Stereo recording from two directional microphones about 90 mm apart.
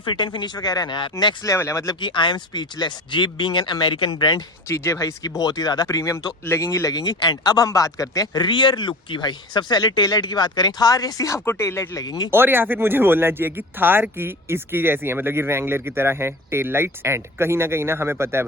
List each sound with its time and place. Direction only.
0.0 s speech: 60° left (ahead or behind)
1.5 s speech: 30° left (ahead or behind)
1.9 s speech: 60° left (ahead or behind)
4.1 s speech: 50° left (ahead or behind)
4.7 s speech: 30° left (ahead or behind); by 6.0 s 50° left (ahead or behind)
6.0 s speech: 35° left (ahead or behind)
8.4 s speech: 60° left (ahead or behind); by 11.3 s 40° left (ahead or behind)
11.4 s speech: 30° left (ahead or behind)
12.3 s speech: 25° right (ahead or behind)